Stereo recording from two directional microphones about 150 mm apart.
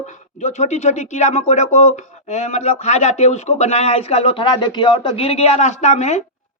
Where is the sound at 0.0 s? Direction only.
50° left (ahead or behind).